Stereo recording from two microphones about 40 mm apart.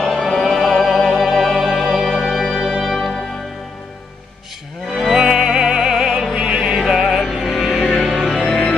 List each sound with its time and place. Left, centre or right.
0.0 s music: centre
2.3 s organ: centre
2.8 s music: centre
4.9 s music: centre
6.3 s music: right
6.8 s music: centre